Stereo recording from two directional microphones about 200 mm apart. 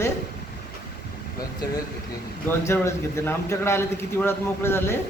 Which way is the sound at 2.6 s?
15° left (ahead or behind).